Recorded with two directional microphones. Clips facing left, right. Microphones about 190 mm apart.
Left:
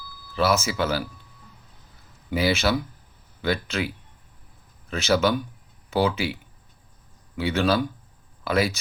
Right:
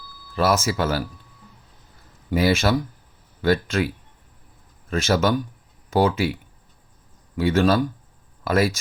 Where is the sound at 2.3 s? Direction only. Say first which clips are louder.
Right 3 dB; 50° right (ahead or behind).